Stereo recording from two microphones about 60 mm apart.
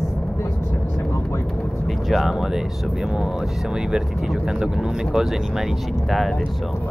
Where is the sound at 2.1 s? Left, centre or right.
Centre.